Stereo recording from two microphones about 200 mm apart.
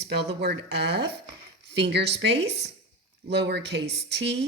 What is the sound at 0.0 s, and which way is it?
Speech, 55° right (ahead or behind).